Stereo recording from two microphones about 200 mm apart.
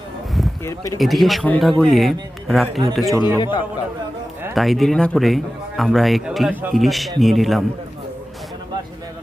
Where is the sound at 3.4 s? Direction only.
20° left (ahead or behind).